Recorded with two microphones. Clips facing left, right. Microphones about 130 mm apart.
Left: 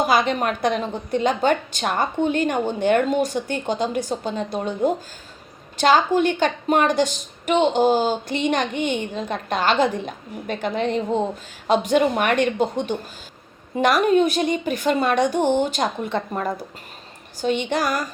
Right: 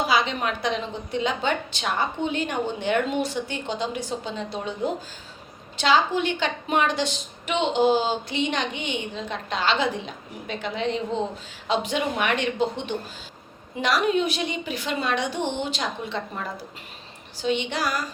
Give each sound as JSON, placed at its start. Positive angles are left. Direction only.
{"t": 0.0, "sound": "a woman's voice", "side_deg": 50}
{"t": 5.7, "sound": "a woman's voice", "side_deg": 50}